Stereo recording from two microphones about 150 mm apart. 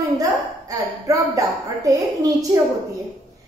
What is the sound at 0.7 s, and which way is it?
A woman's voice, 20° right (ahead or behind).